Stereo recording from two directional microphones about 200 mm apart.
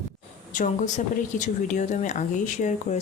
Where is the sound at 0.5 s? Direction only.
40° left (ahead or behind).